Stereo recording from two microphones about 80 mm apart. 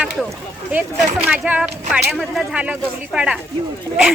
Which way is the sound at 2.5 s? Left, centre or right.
Centre.